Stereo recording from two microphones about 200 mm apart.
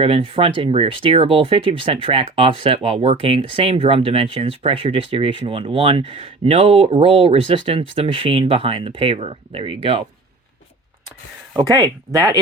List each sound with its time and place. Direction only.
0.0 s speech: 30° right (ahead or behind)
11.5 s speech: 20° right (ahead or behind)